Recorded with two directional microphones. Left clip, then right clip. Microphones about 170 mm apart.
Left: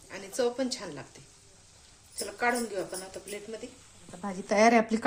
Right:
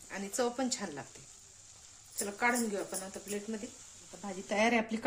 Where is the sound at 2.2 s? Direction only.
55° right (ahead or behind).